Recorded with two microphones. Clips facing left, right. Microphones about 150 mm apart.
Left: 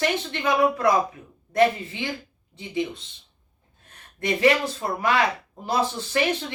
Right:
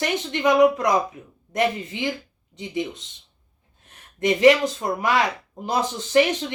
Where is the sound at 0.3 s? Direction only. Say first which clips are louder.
Right 8 dB; 20° right (ahead or behind).